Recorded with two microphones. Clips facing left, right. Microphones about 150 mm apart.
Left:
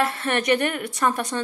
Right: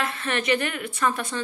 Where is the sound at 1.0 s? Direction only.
40° left (ahead or behind).